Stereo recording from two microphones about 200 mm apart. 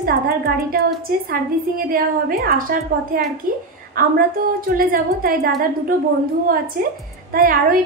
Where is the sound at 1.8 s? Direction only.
45° right (ahead or behind).